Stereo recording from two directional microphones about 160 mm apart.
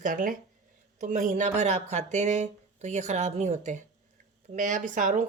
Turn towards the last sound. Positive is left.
turn(degrees=-55)  # may be behind; listen again after turning